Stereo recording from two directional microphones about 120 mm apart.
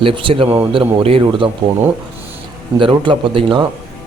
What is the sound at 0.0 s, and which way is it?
A man's voice, 45° right (ahead or behind).